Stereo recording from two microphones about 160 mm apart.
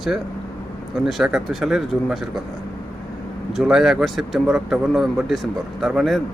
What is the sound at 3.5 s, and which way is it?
Speech, centre (ahead or behind).